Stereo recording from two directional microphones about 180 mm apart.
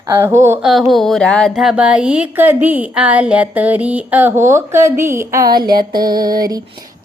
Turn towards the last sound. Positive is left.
turn(degrees=-20)  # may be behind; listen again after turning